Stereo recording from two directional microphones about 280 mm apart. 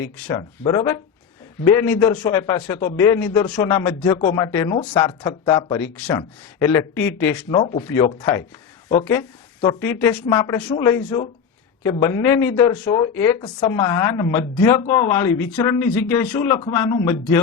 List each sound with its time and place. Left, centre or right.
0.0 s speech: centre
7.5 s speech: left
9.8 s speech: centre